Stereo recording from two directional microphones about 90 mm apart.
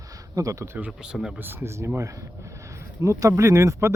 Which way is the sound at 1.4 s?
25° right (ahead or behind).